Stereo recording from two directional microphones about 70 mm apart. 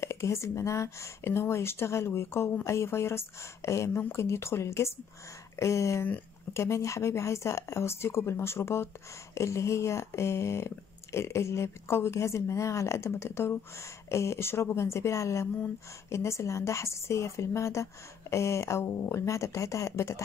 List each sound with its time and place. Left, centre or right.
0.0 s speech: left